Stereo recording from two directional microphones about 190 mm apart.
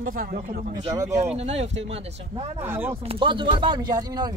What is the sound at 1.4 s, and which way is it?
Speech, 35° right (ahead or behind).